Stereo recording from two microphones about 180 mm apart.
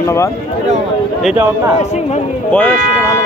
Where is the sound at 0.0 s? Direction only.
15° left (ahead or behind).